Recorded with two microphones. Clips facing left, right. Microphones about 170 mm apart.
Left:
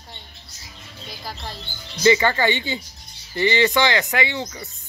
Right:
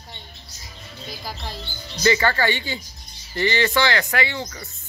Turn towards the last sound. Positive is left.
turn(degrees=15)  # may be behind; listen again after turning